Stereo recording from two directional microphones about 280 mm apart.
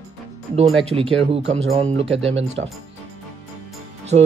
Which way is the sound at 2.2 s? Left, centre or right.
Right.